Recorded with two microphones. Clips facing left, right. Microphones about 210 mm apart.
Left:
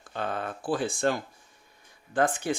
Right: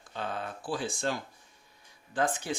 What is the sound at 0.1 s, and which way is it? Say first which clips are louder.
Speech: left 4 dB; 55° left (ahead or behind).